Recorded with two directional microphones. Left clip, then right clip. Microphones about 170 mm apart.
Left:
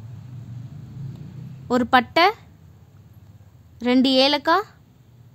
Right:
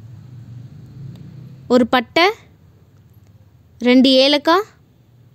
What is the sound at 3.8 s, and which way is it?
Speech, 30° right (ahead or behind).